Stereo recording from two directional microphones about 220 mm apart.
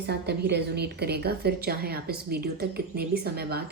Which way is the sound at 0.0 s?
50° right (ahead or behind).